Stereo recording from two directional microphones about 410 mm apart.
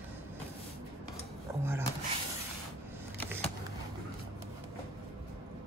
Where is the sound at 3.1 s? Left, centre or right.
Centre.